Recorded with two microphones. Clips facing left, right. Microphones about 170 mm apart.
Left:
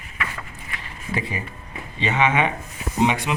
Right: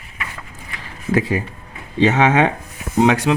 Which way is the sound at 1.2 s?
90° right.